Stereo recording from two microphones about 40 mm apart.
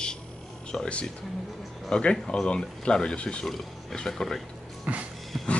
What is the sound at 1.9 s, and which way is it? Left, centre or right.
Speech, left.